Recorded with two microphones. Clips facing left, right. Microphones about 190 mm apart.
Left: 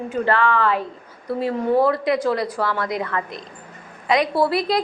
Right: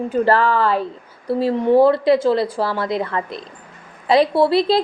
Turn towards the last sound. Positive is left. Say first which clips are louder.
# right 4 dB
turn(degrees=-25)  # may be behind; listen again after turning